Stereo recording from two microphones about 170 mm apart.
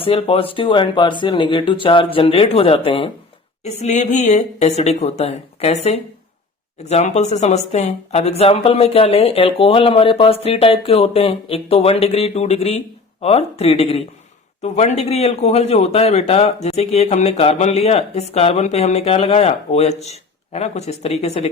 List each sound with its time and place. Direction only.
0.0 s a man's voice: 35° left (ahead or behind)
3.6 s a man's voice: 40° left (ahead or behind)